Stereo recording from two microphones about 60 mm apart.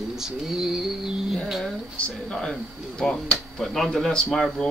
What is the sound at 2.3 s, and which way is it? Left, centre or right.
Speech, centre.